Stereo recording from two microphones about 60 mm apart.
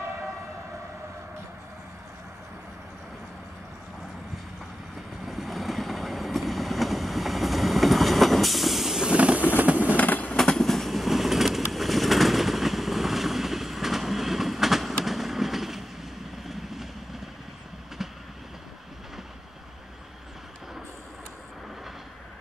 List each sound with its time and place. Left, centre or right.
5.2 s vehicle: centre
9.1 s vehicle: right
9.9 s train: left
10.3 s train: centre
15.0 s vehicle: centre
18.0 s train: centre